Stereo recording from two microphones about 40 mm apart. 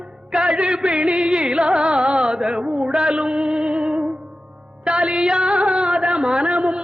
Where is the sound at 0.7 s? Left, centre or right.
Right.